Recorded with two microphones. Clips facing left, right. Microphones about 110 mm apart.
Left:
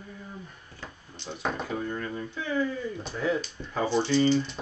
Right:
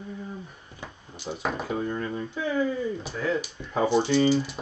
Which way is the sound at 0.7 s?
10° right (ahead or behind).